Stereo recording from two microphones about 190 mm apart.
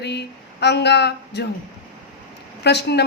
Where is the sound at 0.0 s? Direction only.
60° left (ahead or behind).